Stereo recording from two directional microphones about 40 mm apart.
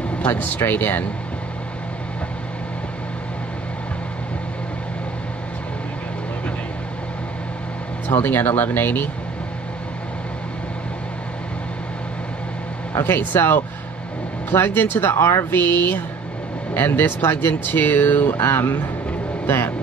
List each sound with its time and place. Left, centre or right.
0.3 s speech: left
8.1 s speech: left
13.0 s speech: left
15.5 s speech: left